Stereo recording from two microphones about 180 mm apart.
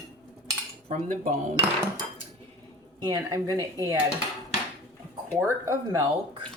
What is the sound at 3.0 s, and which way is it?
Speech, 20° right (ahead or behind).